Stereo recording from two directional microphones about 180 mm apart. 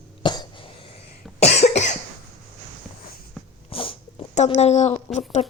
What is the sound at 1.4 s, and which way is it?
Cough, 40° left (ahead or behind).